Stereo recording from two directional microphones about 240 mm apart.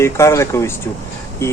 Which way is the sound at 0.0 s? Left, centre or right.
Centre.